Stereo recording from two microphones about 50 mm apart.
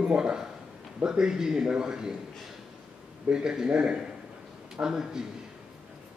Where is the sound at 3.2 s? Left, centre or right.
Centre.